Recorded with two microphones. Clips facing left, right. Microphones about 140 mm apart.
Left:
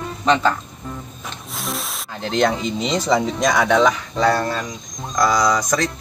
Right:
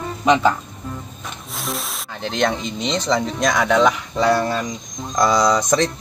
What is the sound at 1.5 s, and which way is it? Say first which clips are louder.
Speech: right 1 dB; centre (ahead or behind).